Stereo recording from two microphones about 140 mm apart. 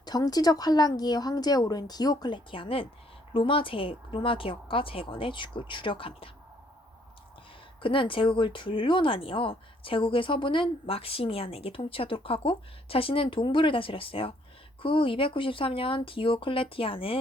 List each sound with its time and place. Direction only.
0.0 s speech: 30° left (ahead or behind)
7.8 s speech: 40° left (ahead or behind)